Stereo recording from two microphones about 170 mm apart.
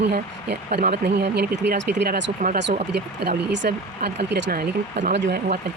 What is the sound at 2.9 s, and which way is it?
Speech, 85° right.